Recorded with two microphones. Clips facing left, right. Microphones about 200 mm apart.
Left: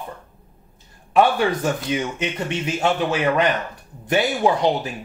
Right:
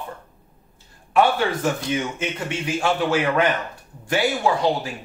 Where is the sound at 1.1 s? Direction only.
15° left (ahead or behind).